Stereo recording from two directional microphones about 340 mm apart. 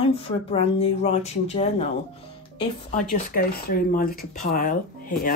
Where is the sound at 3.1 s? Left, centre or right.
Left.